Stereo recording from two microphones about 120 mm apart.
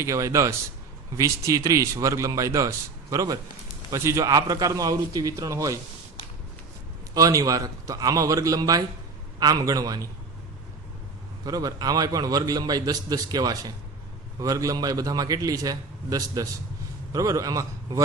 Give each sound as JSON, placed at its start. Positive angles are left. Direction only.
{"t": 0.0, "sound": "a man's voice", "side_deg": -25}
{"t": 7.1, "sound": "a man's voice", "side_deg": -30}
{"t": 11.4, "sound": "a man's voice", "side_deg": -30}